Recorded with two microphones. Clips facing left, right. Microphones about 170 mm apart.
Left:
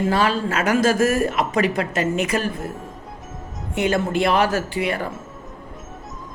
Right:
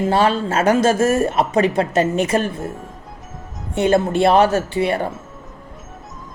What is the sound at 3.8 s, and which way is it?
A woman's voice, 30° right (ahead or behind).